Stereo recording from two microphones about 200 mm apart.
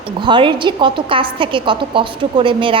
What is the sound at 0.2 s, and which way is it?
A woman's voice, 25° right (ahead or behind).